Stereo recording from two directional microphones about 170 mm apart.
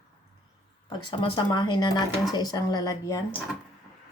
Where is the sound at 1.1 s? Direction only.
30° left (ahead or behind).